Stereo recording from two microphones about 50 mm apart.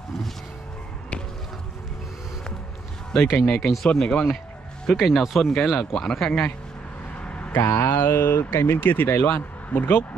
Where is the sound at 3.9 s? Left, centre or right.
Centre.